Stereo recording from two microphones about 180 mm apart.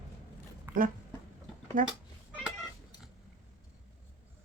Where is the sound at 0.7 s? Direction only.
10° right (ahead or behind).